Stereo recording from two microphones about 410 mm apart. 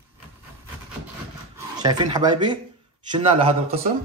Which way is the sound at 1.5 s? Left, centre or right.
Centre.